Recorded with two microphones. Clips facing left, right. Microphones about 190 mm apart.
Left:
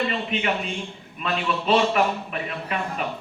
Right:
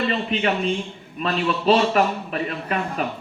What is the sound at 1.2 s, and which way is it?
A man's voice, 35° right (ahead or behind).